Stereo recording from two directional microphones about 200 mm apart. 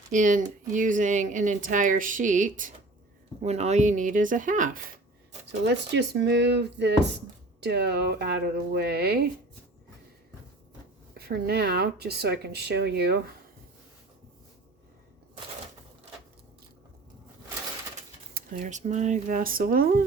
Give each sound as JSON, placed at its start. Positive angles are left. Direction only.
{"t": 0.1, "sound": "speech", "side_deg": -40}
{"t": 5.5, "sound": "speech", "side_deg": -60}
{"t": 11.1, "sound": "speech", "side_deg": -50}
{"t": 18.3, "sound": "a sound", "side_deg": -45}
{"t": 18.8, "sound": "speech", "side_deg": -35}